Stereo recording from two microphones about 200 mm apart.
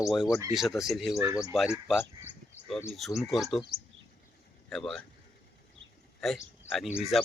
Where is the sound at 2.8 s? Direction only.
Centre (ahead or behind).